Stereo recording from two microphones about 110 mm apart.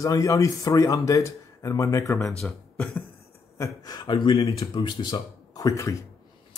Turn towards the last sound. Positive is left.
turn(degrees=30)  # may be behind; listen again after turning